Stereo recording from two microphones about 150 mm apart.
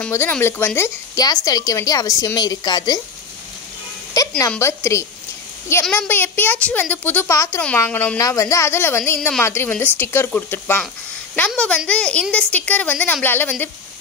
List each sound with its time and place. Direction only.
0.1 s a woman's voice: 15° left (ahead or behind)
4.2 s a sound: 25° left (ahead or behind)
4.5 s a woman's voice: 20° left (ahead or behind)